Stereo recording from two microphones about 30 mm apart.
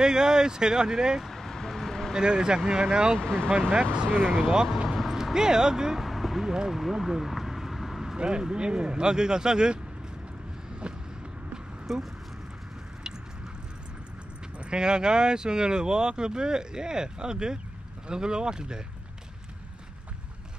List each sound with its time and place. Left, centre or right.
0.0 s speech: right
1.2 s vehicle: centre
2.1 s speech: right
3.2 s speech: left
3.8 s speech: right
4.8 s a sound: centre
5.1 s speech: centre
5.9 s a sound: centre
6.7 s vehicle: centre
8.2 s speech: right
10.8 s vehicle: right
11.9 s speech: centre
14.6 s speech: right